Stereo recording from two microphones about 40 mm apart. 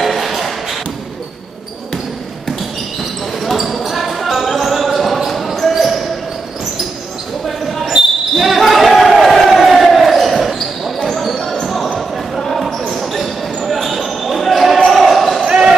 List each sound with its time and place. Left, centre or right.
0.0 s a sound: centre
3.4 s basketball bounce: centre
7.4 s basketball bounce: centre
15.4 s basketball bounce: centre